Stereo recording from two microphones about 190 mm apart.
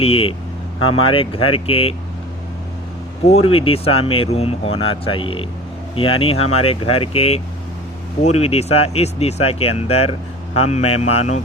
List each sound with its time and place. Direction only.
0.0 s speech: 30° left (ahead or behind)
3.2 s speech: 30° left (ahead or behind)